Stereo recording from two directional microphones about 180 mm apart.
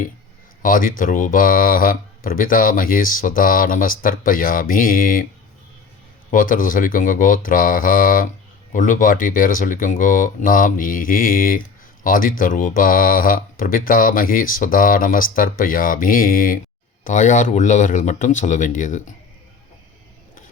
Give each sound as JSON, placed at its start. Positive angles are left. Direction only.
{"t": 0.6, "sound": "speech", "side_deg": 50}
{"t": 6.3, "sound": "speech", "side_deg": 50}